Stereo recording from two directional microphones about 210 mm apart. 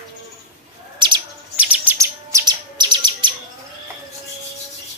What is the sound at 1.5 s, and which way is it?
Chirp, 10° right (ahead or behind).